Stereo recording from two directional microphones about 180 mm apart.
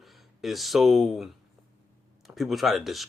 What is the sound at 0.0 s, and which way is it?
Speech, centre (ahead or behind).